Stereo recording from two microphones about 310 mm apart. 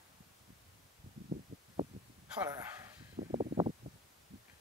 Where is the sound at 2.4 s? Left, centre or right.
Centre.